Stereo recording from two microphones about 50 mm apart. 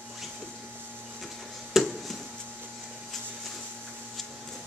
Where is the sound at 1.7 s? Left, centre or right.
Centre.